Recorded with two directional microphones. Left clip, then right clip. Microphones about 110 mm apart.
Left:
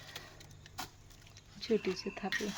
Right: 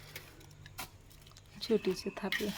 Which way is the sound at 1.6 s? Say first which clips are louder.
Right 1 dB; 35° right (ahead or behind).